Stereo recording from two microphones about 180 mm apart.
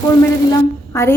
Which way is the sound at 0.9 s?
15° left (ahead or behind).